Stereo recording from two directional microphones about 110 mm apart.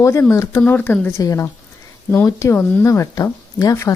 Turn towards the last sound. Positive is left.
turn(degrees=30)  # may be behind; listen again after turning